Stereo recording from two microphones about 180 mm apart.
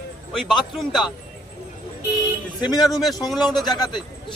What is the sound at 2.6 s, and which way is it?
A man's voice, 20° left (ahead or behind).